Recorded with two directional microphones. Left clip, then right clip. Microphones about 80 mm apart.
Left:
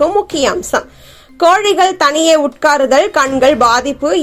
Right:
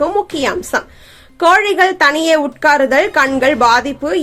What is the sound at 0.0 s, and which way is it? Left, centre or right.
Speech, left.